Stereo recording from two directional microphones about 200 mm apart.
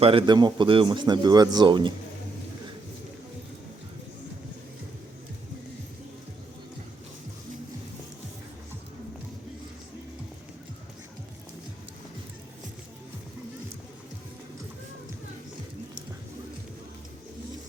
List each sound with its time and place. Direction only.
0.0 s speech: 25° right (ahead or behind)